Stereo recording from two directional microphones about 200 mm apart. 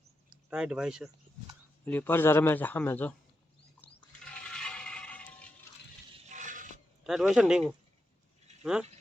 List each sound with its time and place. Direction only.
0.5 s speech: 5° right (ahead or behind)
1.8 s a man's voice: 10° left (ahead or behind)
3.8 s a sound: 10° left (ahead or behind)
4.3 s toilet flush: 5° left (ahead or behind)
6.2 s a sound: 40° right (ahead or behind)
7.0 s speech: centre (ahead or behind)